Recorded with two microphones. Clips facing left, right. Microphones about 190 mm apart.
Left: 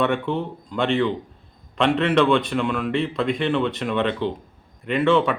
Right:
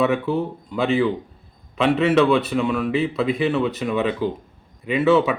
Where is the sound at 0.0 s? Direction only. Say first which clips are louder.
Right 2 dB; 5° right (ahead or behind).